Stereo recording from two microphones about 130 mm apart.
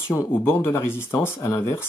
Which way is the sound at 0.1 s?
15° left (ahead or behind).